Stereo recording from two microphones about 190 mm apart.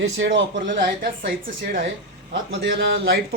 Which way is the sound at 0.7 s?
55° right (ahead or behind).